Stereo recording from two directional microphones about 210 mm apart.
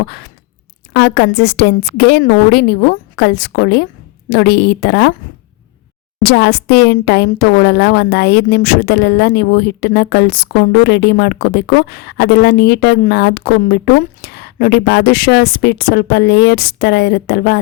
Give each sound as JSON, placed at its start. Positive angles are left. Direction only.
{"t": 0.9, "sound": "speech", "side_deg": 55}
{"t": 6.2, "sound": "speech", "side_deg": 50}